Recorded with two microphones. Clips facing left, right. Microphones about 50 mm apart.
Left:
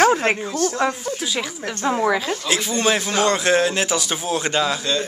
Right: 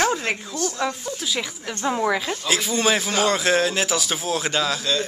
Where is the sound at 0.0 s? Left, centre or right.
Left.